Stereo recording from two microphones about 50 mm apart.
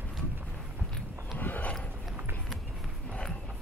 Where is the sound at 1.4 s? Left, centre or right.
Left.